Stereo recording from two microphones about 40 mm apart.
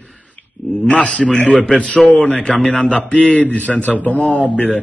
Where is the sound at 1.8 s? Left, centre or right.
Left.